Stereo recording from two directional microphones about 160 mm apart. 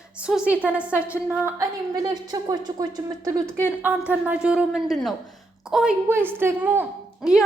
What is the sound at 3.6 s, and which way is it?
A woman's voice, 10° right (ahead or behind).